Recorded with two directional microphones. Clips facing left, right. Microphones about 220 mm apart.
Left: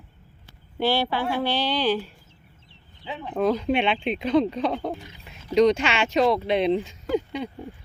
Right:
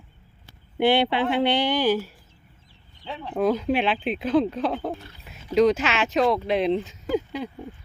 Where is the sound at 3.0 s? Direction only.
5° left (ahead or behind).